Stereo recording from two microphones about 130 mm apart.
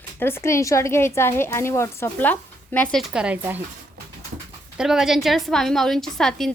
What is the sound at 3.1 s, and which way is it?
Speech, 10° right (ahead or behind).